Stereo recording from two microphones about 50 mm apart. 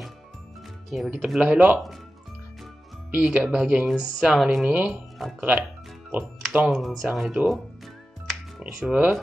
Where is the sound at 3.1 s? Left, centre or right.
Right.